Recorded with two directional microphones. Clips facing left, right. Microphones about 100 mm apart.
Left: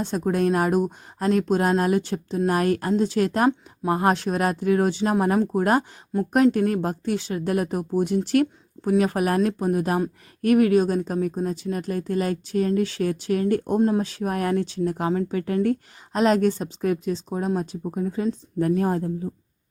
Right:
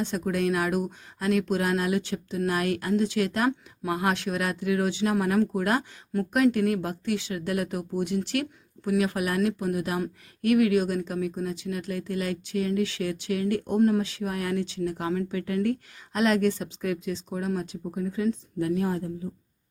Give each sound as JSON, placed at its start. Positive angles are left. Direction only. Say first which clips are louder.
{"t": 0.0, "sound": "speech", "louder": "left 4 dB", "side_deg": 40}
{"t": 13.7, "sound": "speech", "louder": "even", "side_deg": 25}
{"t": 14.0, "sound": "speech", "louder": "left 5 dB", "side_deg": 40}